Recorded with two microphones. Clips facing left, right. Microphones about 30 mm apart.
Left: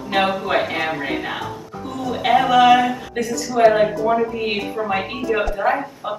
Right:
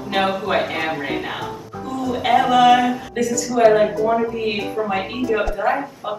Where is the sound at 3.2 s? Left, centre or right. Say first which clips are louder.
Right 3 dB; centre.